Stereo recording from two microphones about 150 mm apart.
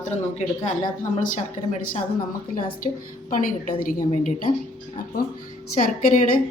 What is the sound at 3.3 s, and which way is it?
Speech, 60° left (ahead or behind).